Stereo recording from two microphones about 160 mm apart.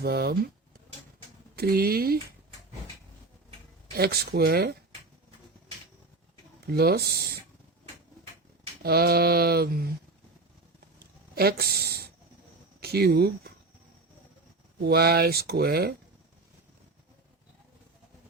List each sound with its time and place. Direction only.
0.0 s speech: 80° right
1.5 s mantra: 70° right (ahead or behind)
3.9 s mantra: 75° right (ahead or behind)
6.7 s mantra: 80° right
8.8 s mantra: 75° right (ahead or behind)
11.3 s mantra: 75° right (ahead or behind)
12.8 s speech: 80° right
14.8 s mantra: 80° right